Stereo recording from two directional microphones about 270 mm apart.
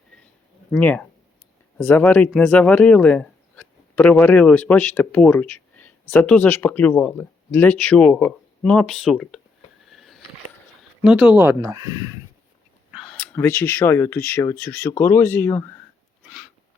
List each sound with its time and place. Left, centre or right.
0.7 s speech: centre
9.8 s a sound: centre
11.0 s speech: centre
12.9 s speech: centre